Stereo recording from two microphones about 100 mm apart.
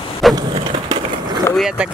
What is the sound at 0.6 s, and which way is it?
Skateboard, 60° right (ahead or behind).